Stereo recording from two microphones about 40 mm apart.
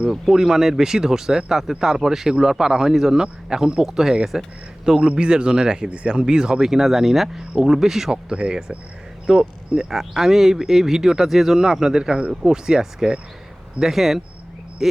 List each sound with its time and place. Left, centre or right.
0.3 s speech: centre
8.1 s speech: right